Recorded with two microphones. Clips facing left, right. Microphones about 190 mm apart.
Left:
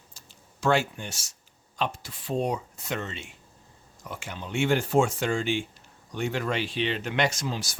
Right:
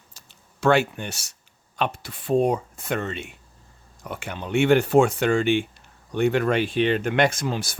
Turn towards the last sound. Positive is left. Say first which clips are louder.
# right 5 dB
turn(degrees=-60)  # may be behind; listen again after turning